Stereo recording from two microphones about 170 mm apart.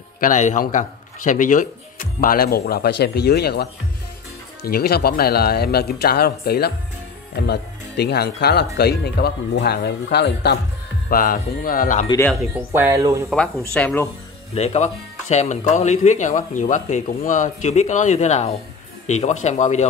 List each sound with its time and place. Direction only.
0.2 s speech: 45° left (ahead or behind); by 3.6 s 70° left (ahead or behind)
4.6 s speech: 65° left (ahead or behind)
7.4 s speech: 75° left (ahead or behind)
11.1 s speech: 55° left (ahead or behind)
12.5 s speech: 15° right (ahead or behind)
13.6 s speech: 10° left (ahead or behind)
14.5 s speech: 40° left (ahead or behind)